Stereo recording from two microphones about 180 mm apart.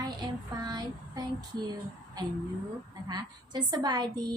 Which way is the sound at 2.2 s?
20° right (ahead or behind).